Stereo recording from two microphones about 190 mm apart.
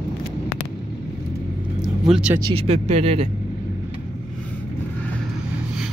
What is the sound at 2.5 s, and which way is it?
Speech, 30° right (ahead or behind).